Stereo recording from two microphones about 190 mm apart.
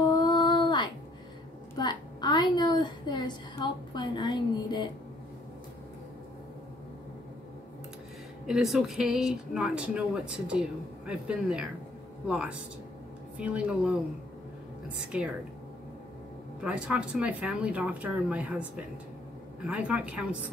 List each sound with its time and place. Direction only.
0.0 s a sound: 20° left (ahead or behind)
8.5 s speech: centre (ahead or behind)
15.0 s speech: 5° right (ahead or behind)
16.6 s speech: 5° right (ahead or behind)